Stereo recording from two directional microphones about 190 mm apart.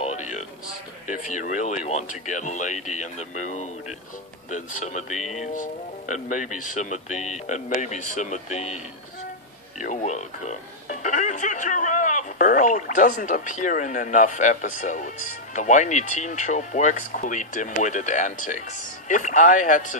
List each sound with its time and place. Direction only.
0.0 s music: 40° left (ahead or behind)
1.0 s speech: 40° left (ahead or behind)
4.5 s speech: 40° left (ahead or behind)